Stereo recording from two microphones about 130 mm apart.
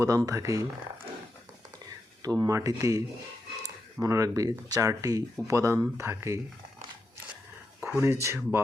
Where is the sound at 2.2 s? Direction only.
25° right (ahead or behind).